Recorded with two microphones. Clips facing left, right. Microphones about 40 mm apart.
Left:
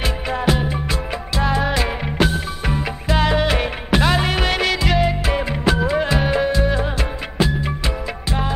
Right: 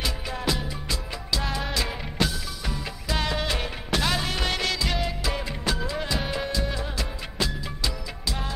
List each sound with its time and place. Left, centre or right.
0.0 s music: left